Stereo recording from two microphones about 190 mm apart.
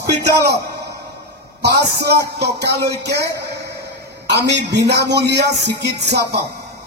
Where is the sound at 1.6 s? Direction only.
60° right (ahead or behind).